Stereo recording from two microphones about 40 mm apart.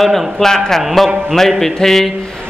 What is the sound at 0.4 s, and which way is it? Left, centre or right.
Speech, centre.